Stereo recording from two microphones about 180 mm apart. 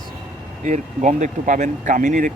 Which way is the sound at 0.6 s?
40° right (ahead or behind).